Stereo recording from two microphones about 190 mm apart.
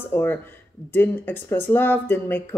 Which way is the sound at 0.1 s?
10° left (ahead or behind).